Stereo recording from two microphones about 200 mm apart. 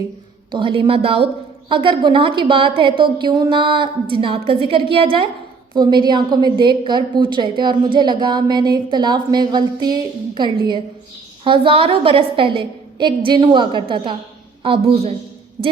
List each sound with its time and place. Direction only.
0.5 s a woman's voice: 25° right (ahead or behind)